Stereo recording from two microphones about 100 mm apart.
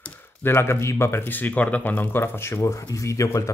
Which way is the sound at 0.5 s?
25° left (ahead or behind).